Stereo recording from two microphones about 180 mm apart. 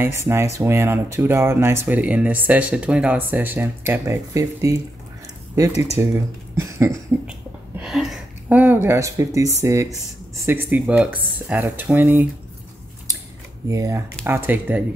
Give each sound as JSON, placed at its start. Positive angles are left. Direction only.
{"t": 0.0, "sound": "speech", "side_deg": -15}
{"t": 5.9, "sound": "speech", "side_deg": -15}
{"t": 7.8, "sound": "speech", "side_deg": 0}
{"t": 13.7, "sound": "speech", "side_deg": -15}